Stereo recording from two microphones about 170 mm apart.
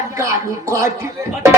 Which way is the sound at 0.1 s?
15° right (ahead or behind).